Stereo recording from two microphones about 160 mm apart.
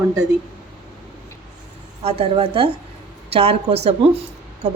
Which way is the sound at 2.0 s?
40° right (ahead or behind).